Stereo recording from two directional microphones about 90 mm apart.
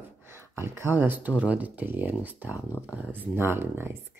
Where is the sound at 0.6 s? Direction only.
25° right (ahead or behind).